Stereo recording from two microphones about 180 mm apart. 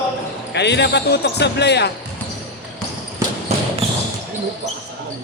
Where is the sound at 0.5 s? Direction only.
70° left (ahead or behind).